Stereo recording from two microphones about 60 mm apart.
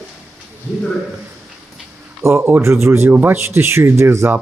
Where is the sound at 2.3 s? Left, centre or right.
Right.